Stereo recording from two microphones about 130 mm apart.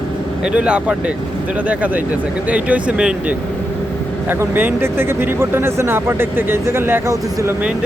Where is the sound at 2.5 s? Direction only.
10° right (ahead or behind).